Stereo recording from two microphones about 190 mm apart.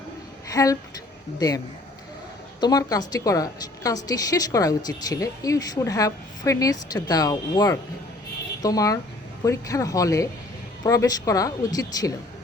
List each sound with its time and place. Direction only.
0.5 s a woman's voice: 15° left (ahead or behind)